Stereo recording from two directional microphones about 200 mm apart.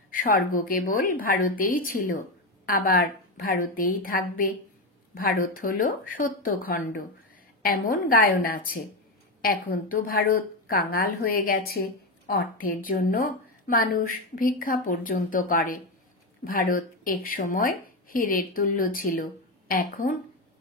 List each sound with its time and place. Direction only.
0.1 s a woman's voice: 45° left (ahead or behind)